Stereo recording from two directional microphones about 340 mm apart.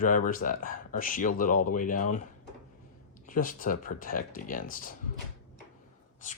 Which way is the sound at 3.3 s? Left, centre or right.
Left.